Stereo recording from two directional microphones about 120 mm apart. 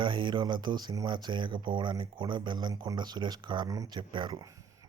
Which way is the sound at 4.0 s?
40° right (ahead or behind).